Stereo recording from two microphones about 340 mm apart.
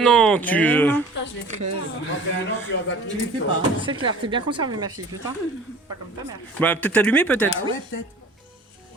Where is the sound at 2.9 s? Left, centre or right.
Left.